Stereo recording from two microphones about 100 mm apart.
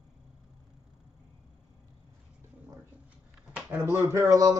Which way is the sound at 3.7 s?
30° right (ahead or behind).